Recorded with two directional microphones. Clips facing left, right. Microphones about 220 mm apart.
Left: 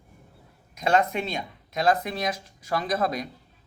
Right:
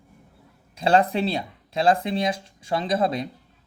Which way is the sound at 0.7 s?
30° right (ahead or behind).